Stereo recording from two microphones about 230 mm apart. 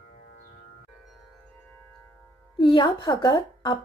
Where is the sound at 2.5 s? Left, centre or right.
Centre.